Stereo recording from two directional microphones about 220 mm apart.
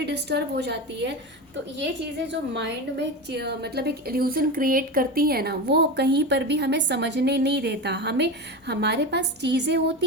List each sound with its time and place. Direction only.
0.0 s a woman's voice: 50° right (ahead or behind)